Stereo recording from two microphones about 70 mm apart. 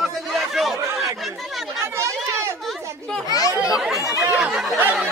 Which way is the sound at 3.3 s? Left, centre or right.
Left.